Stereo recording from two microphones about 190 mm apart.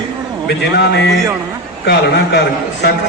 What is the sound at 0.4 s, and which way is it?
A man's voice, 60° left (ahead or behind).